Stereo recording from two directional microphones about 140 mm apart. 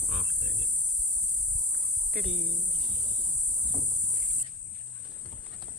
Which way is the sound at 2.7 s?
55° right (ahead or behind).